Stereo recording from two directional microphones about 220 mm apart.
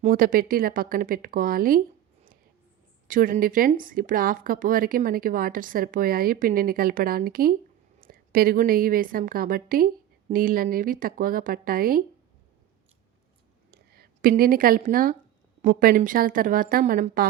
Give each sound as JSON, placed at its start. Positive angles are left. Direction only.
{"t": 0.0, "sound": "speech", "side_deg": -40}
{"t": 3.1, "sound": "speech", "side_deg": -40}
{"t": 13.7, "sound": "a sound", "side_deg": -45}
{"t": 15.6, "sound": "speech", "side_deg": -40}